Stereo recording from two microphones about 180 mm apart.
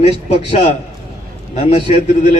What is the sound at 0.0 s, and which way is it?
A man's voice, 35° left (ahead or behind).